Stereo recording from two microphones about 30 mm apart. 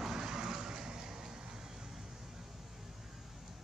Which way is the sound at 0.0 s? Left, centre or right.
Centre.